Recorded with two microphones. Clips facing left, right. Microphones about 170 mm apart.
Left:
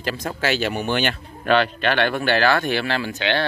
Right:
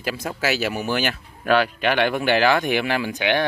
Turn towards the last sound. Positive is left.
turn(degrees=-15)  # may be behind; listen again after turning